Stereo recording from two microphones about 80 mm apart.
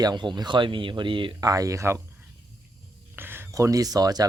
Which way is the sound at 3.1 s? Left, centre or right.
Right.